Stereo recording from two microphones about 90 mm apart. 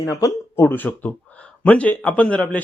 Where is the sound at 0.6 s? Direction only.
20° left (ahead or behind).